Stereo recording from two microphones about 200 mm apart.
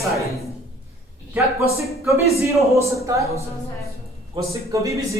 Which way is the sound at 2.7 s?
15° right (ahead or behind).